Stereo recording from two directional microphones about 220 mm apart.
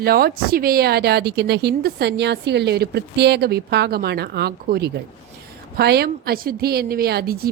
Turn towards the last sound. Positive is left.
turn(degrees=-45)  # may be behind; listen again after turning